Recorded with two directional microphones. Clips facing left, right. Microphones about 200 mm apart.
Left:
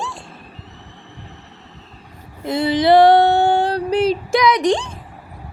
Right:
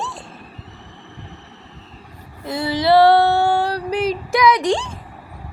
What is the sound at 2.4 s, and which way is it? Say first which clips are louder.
Female singing: left 4 dB; 20° left (ahead or behind).